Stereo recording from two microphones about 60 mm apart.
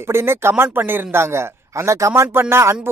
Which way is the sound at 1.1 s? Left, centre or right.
Right.